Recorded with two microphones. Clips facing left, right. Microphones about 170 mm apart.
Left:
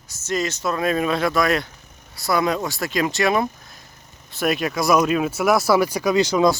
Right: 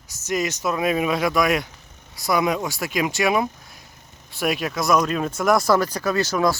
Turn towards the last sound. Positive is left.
turn(degrees=15)  # may be behind; listen again after turning